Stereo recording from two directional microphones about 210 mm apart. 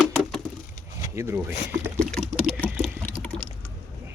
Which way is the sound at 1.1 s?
15° right (ahead or behind).